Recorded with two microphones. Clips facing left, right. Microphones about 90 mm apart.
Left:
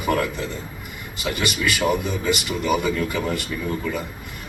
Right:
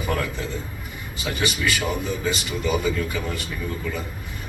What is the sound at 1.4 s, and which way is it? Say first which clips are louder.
Speech: left 2 dB; 60° left (ahead or behind).